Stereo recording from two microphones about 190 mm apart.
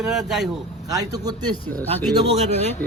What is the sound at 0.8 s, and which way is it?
Speech, 20° right (ahead or behind).